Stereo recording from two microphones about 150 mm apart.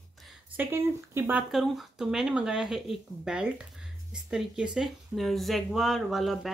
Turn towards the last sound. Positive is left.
turn(degrees=0)  # may be behind; listen again after turning